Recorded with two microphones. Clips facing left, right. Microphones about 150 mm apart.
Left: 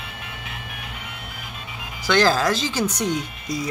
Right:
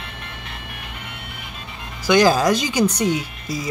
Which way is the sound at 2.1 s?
15° right (ahead or behind).